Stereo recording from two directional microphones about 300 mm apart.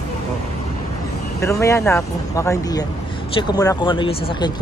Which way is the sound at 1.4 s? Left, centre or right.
Centre.